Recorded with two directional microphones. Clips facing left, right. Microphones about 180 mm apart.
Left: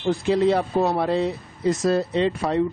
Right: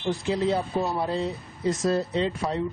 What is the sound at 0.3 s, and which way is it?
A man's voice, 70° left (ahead or behind).